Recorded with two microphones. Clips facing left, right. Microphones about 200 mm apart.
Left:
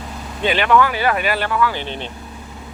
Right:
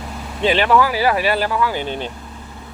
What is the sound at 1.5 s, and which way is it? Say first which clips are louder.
Speech: even; 15° right (ahead or behind).